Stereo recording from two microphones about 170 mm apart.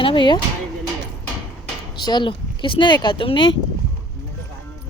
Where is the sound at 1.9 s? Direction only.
25° left (ahead or behind).